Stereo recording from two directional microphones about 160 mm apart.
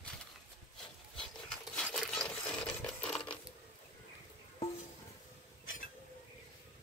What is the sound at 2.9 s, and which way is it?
Coin, 5° left (ahead or behind).